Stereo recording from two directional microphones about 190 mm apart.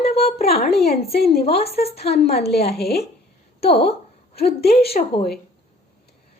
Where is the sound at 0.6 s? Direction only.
55° left (ahead or behind).